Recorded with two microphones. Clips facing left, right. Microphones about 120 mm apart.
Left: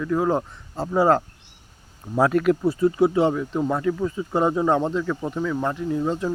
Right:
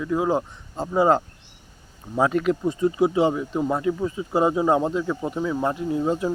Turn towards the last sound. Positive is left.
turn(degrees=-15)  # may be behind; listen again after turning